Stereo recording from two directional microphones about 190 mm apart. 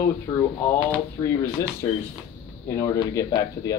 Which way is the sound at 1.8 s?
20° left (ahead or behind).